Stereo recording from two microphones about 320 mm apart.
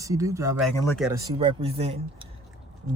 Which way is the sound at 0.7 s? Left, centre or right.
Centre.